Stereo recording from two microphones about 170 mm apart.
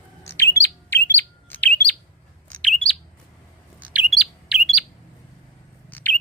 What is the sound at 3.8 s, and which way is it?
Bird, 5° right (ahead or behind).